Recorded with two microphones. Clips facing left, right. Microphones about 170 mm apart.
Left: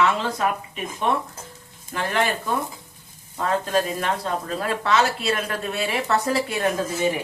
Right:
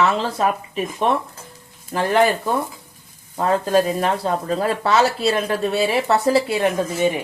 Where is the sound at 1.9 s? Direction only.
35° right (ahead or behind).